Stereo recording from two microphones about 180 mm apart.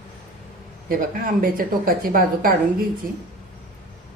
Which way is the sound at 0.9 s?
50° right (ahead or behind).